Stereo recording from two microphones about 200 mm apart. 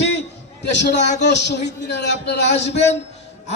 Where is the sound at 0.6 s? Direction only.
55° left (ahead or behind).